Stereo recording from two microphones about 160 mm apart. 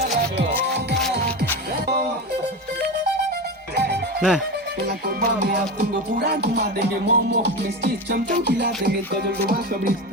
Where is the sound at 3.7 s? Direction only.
85° right; by 9.9 s 70° right (ahead or behind).